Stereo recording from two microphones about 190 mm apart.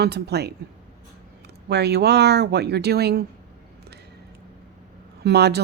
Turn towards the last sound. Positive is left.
turn(degrees=-60)  # may be behind; listen again after turning